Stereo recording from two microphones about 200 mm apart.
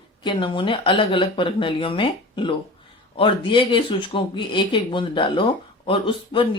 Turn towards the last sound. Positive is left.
turn(degrees=25)  # may be behind; listen again after turning